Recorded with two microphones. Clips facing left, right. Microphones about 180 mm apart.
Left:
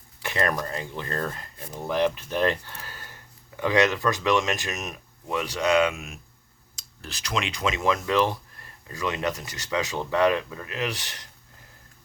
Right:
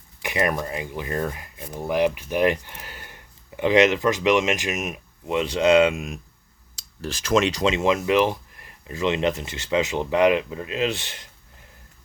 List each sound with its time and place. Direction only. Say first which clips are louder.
0.2 s speech: right 2 dB; 15° right (ahead or behind); by 7.6 s 45° right (ahead or behind)
7.6 s speech: right 4 dB; 25° right (ahead or behind)